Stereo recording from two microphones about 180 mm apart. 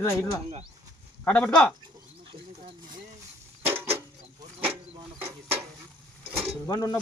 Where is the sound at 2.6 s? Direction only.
30° right (ahead or behind).